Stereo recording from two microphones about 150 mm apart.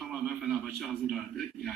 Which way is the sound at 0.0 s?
5° right (ahead or behind).